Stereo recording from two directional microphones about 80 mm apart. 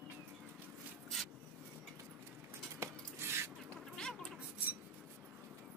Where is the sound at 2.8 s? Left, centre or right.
Right.